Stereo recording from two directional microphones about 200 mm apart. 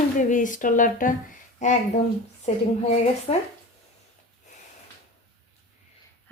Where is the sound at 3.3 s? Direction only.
30° left (ahead or behind).